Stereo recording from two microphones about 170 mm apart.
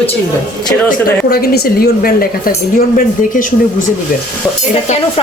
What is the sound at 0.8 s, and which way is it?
Speech, 65° left (ahead or behind).